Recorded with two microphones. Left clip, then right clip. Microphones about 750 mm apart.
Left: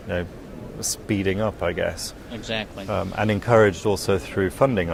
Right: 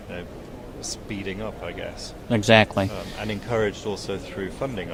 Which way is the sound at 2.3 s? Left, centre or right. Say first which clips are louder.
Right 13 dB; right.